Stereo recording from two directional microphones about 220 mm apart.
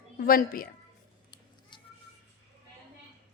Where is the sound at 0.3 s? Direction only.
40° left (ahead or behind).